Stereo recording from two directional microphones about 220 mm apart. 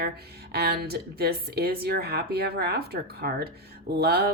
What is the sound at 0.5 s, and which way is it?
A woman's voice, 45° right (ahead or behind).